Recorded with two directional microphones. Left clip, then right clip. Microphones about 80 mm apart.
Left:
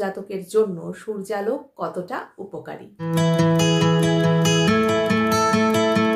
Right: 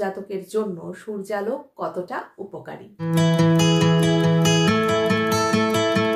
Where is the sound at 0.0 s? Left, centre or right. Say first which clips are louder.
Even; left.